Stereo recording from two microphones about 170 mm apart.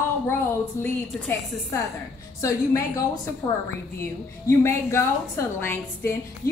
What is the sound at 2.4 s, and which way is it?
A woman's voice, 20° left (ahead or behind).